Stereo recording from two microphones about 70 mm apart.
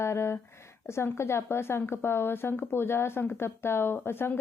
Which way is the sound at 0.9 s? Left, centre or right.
Left.